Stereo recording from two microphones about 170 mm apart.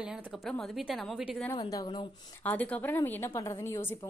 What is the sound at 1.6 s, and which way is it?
Speech, 25° left (ahead or behind).